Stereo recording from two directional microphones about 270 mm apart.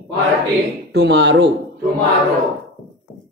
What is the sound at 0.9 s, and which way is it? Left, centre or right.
Speech, right.